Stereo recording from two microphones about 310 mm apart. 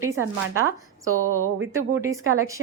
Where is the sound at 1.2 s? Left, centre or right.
Right.